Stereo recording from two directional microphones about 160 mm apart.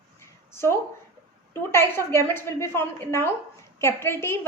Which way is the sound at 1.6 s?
15° left (ahead or behind).